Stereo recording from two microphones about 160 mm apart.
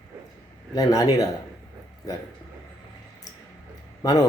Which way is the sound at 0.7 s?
20° left (ahead or behind).